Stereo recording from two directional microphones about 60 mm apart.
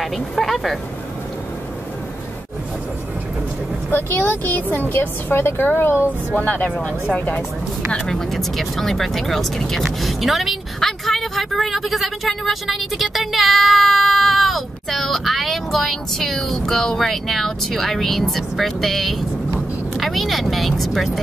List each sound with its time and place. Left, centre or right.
0.0 s speech: centre
4.1 s a woman's voice: left
5.9 s speech: right
6.4 s speech: left
8.1 s speech: centre